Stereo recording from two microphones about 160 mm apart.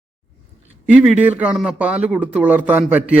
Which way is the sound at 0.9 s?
10° right (ahead or behind).